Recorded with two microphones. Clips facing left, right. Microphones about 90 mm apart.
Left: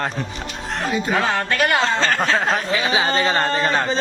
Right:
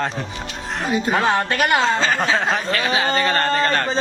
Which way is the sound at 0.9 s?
20° right (ahead or behind).